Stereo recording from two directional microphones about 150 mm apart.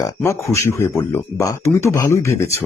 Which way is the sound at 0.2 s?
20° left (ahead or behind).